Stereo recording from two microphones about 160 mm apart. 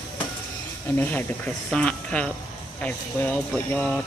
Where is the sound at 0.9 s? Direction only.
10° left (ahead or behind).